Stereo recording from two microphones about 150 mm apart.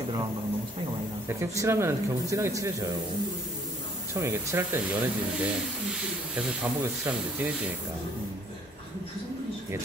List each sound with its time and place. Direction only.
1.4 s speech: 15° right (ahead or behind)
4.1 s speech: 20° right (ahead or behind)